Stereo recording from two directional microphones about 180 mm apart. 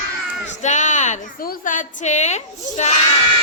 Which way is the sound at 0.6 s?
40° left (ahead or behind).